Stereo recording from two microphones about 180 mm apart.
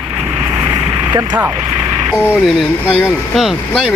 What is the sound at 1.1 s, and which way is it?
Speech, 15° right (ahead or behind).